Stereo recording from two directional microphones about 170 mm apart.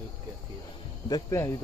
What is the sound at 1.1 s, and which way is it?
Speech, 15° left (ahead or behind).